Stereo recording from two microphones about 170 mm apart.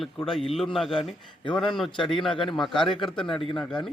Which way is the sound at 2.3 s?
30° left (ahead or behind).